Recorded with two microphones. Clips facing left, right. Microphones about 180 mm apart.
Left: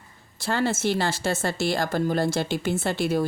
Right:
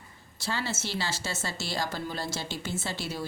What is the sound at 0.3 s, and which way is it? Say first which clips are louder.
Speech: left 8 dB; 55° left (ahead or behind).